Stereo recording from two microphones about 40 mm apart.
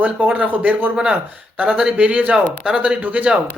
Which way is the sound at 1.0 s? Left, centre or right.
Right.